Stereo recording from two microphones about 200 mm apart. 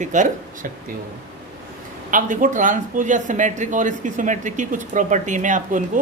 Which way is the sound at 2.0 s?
40° right (ahead or behind).